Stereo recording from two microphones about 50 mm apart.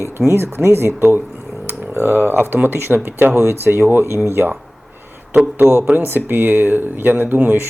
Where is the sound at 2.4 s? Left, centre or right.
Right.